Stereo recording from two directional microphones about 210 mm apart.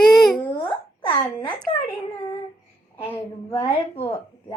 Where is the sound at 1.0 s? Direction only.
20° left (ahead or behind).